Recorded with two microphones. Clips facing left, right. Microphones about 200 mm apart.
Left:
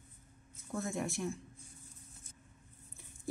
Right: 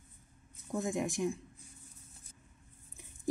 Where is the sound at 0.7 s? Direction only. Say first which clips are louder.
Right 3 dB; 15° right (ahead or behind).